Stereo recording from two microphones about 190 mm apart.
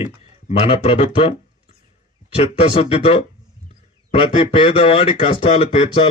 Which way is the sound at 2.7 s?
30° left (ahead or behind).